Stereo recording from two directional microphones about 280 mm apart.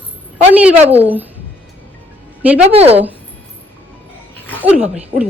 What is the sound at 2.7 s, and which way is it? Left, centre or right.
Speech, right.